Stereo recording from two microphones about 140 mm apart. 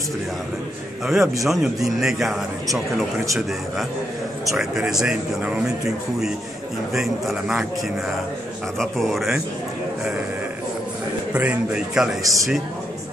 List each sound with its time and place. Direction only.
1.0 s speech: 5° right (ahead or behind)
4.6 s speech: centre (ahead or behind)
8.7 s speech: centre (ahead or behind)
11.3 s speech: 5° right (ahead or behind)
12.2 s a man's voice: 25° right (ahead or behind)